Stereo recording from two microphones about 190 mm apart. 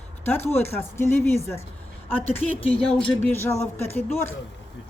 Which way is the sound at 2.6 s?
30° left (ahead or behind).